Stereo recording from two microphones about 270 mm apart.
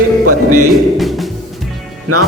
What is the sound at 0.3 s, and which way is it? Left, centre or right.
Speech, right.